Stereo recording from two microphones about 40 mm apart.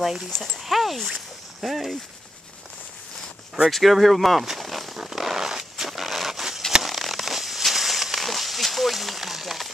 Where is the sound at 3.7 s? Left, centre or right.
Centre.